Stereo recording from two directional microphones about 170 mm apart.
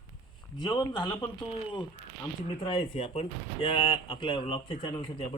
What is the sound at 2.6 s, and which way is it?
Speech, 30° left (ahead or behind).